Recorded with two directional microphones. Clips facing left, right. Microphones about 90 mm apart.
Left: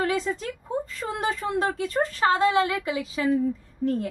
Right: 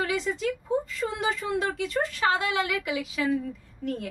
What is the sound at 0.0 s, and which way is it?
A woman's voice, 40° left (ahead or behind).